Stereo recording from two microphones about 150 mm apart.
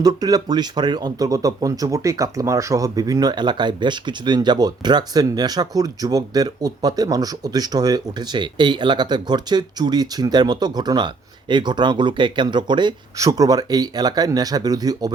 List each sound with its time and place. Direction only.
0.0 s speech: 25° right (ahead or behind)